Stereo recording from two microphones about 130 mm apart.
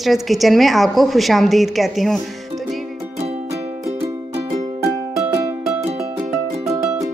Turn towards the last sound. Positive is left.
turn(degrees=-25)  # may be behind; listen again after turning